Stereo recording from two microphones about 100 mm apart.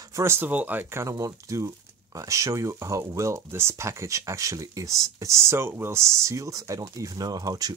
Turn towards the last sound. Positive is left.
turn(degrees=-35)  # may be behind; listen again after turning